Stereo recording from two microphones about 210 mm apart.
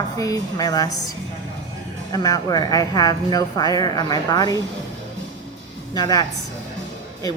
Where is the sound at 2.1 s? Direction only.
20° left (ahead or behind).